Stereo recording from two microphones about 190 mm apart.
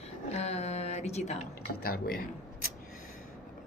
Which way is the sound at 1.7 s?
55° left (ahead or behind).